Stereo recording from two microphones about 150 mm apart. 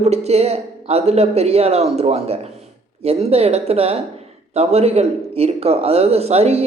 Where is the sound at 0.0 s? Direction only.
45° right (ahead or behind).